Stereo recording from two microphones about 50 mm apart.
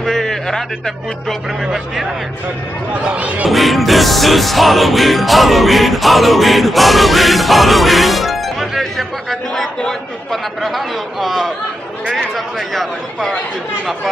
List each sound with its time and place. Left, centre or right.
0.0 s a man's voice: centre
1.6 s music: centre
3.0 s speech: right
3.4 s music: centre